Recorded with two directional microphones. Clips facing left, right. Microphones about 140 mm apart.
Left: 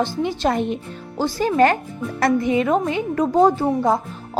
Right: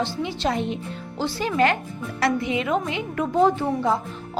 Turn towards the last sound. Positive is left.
turn(degrees=40)  # may be behind; listen again after turning